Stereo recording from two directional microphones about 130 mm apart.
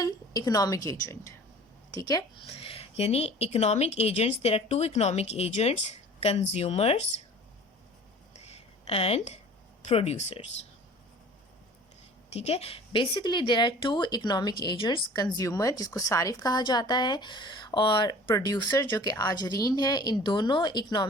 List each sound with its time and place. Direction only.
0.0 s a woman's voice: 30° left (ahead or behind)
2.5 s a woman's voice: 45° left (ahead or behind)
8.4 s a sound: 50° left (ahead or behind)
9.8 s a woman's voice: 50° left (ahead or behind)
12.3 s speech: 55° left (ahead or behind); by 21.1 s 35° left (ahead or behind)